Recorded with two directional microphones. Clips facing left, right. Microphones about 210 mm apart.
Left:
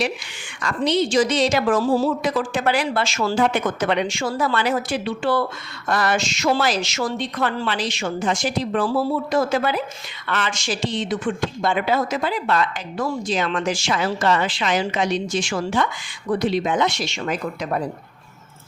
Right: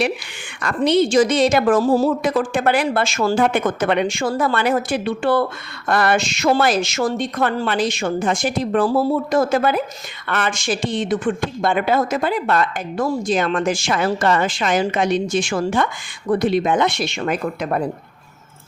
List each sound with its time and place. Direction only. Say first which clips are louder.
0.6 s speech: right 4 dB; 55° right (ahead or behind)